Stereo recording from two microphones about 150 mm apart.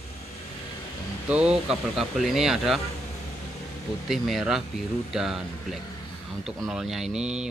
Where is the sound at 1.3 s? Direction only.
5° right (ahead or behind).